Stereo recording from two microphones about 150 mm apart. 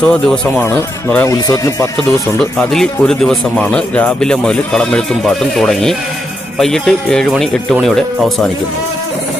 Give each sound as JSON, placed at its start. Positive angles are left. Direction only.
{"t": 0.0, "sound": "speech", "side_deg": 5}
{"t": 1.3, "sound": "speech", "side_deg": 20}
{"t": 2.4, "sound": "speech", "side_deg": 5}